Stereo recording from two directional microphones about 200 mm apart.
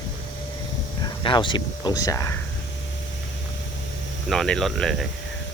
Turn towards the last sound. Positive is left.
turn(degrees=0)  # may be behind; listen again after turning